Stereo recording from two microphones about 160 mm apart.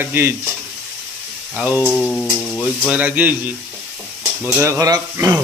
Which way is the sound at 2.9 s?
10° right (ahead or behind).